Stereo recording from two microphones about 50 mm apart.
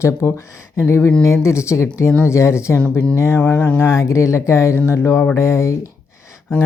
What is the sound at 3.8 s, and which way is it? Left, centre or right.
Speech, left.